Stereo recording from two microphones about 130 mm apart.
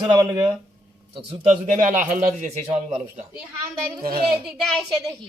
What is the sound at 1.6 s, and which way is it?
Speech, 75° right (ahead or behind).